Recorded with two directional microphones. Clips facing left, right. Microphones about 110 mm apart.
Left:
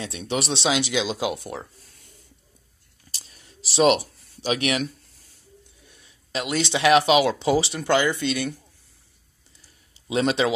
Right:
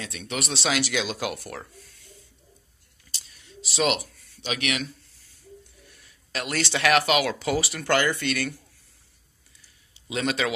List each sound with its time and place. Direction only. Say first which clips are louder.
0.0 s speech: left 5 dB; 30° left (ahead or behind)
1.8 s a sound: right 4 dB; 35° left (ahead or behind)
5.9 s speech: left 3 dB; 20° left (ahead or behind)
10.0 s a man's voice: left 5 dB; 30° left (ahead or behind)